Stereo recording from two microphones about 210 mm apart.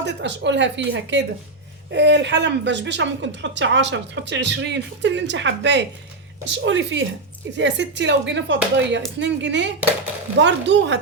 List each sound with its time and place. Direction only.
0.0 s speech: 55° right (ahead or behind)